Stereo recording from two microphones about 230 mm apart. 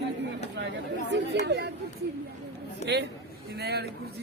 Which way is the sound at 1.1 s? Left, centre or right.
Right.